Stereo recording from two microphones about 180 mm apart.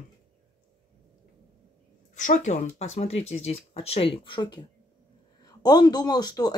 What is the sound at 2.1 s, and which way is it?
Speech, 45° left (ahead or behind).